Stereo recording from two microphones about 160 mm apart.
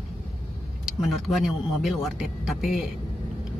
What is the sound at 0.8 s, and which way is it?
Speech, centre (ahead or behind).